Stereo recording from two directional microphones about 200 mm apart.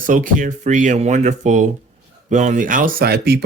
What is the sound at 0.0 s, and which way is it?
Speech, 40° right (ahead or behind).